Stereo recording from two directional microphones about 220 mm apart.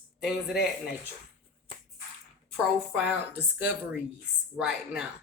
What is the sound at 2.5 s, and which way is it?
A woman's voice, 5° right (ahead or behind).